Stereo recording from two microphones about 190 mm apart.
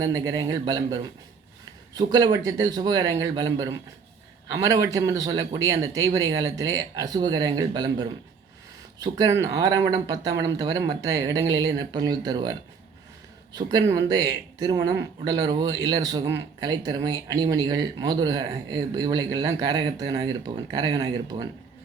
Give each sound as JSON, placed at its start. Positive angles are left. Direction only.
{"t": 0.0, "sound": "speech", "side_deg": -20}
{"t": 2.1, "sound": "a man's voice", "side_deg": -20}